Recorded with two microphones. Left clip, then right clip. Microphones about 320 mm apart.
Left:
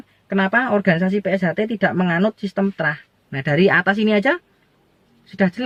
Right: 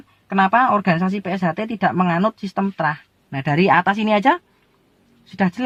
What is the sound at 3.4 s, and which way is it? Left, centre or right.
Speech, right.